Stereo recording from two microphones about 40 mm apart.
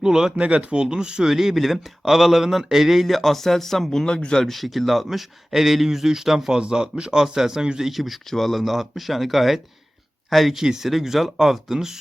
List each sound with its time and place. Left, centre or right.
0.0 s speech: centre
0.3 s speech: right
1.3 s speech: centre
4.0 s speech: left
4.4 s speech: centre
10.6 s speech: centre